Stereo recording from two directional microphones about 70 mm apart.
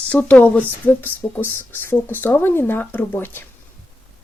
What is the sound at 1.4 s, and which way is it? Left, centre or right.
Speech, left.